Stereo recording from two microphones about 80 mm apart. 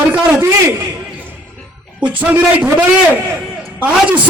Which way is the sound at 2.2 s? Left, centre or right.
Centre.